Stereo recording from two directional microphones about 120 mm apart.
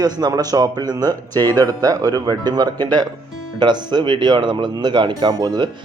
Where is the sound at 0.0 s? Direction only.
35° right (ahead or behind).